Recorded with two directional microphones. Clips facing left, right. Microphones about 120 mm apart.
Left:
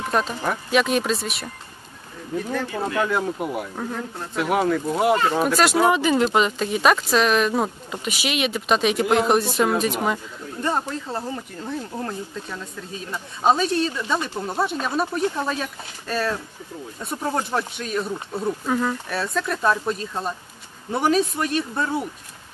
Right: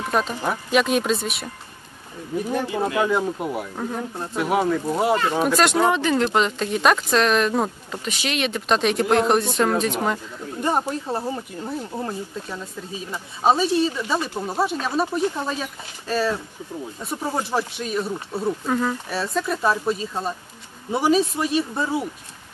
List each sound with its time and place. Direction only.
0.1 s speech: centre (ahead or behind)
2.3 s speech: 15° right (ahead or behind)
3.1 s speech: centre (ahead or behind)
10.6 s speech: 20° right (ahead or behind)
13.1 s speech: 5° right (ahead or behind)